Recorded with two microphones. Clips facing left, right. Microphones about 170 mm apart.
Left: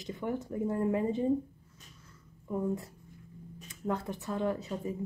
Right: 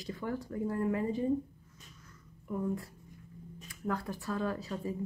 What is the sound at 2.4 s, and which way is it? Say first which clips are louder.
A woman's voice: left 2 dB; 20° left (ahead or behind).